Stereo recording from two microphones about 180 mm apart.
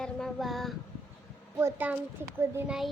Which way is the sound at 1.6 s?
10° right (ahead or behind).